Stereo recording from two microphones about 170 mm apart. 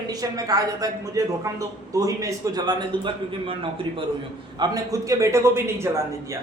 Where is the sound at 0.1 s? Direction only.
20° right (ahead or behind).